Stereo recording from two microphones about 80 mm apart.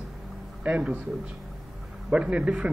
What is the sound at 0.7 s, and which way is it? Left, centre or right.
Speech, centre.